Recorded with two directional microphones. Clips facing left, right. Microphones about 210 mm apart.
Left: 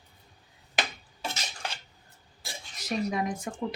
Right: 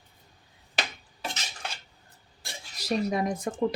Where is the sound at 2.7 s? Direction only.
35° right (ahead or behind).